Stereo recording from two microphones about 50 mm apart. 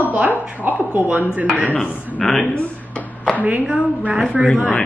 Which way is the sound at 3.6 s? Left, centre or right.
Right.